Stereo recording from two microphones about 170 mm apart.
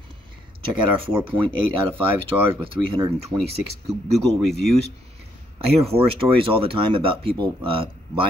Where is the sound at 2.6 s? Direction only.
30° right (ahead or behind).